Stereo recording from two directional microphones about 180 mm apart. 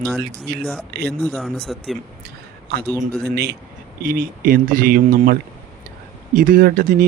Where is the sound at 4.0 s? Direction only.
55° right (ahead or behind).